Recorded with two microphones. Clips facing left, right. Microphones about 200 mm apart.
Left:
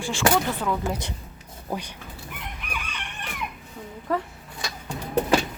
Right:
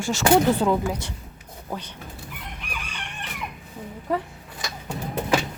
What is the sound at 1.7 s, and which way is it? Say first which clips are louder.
Speech: left 2 dB; 10° left (ahead or behind).